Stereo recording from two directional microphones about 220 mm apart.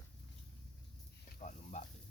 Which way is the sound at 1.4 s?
35° left (ahead or behind).